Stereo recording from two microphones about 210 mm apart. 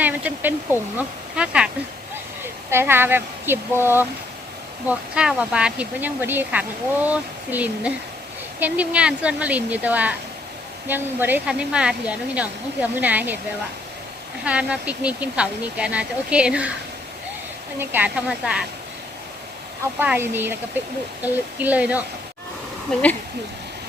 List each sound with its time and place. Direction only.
0.0 s speech: 5° right (ahead or behind)
14.4 s speech: 5° right (ahead or behind)
17.7 s speech: 10° right (ahead or behind)
20.0 s speech: 10° right (ahead or behind)